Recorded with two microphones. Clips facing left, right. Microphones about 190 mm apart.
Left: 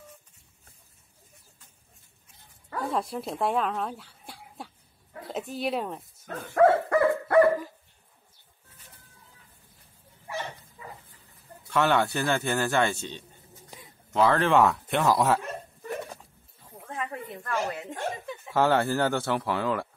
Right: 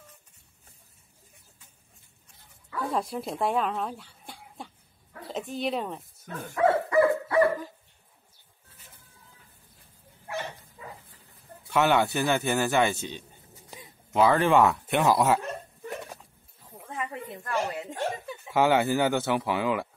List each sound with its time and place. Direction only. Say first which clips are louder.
2.9 s speech: even; centre (ahead or behind)
6.2 s dog: left 4 dB; 50° left (ahead or behind)
11.7 s speech: right 1 dB; 5° right (ahead or behind)
16.8 s a sound: even; 10° right (ahead or behind)
18.5 s speech: right 1 dB; 5° right (ahead or behind)